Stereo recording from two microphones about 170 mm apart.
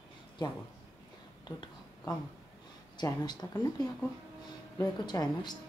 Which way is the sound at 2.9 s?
25° left (ahead or behind).